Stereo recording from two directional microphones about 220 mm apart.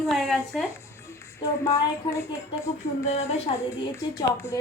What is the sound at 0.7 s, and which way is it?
A woman's voice, 15° left (ahead or behind).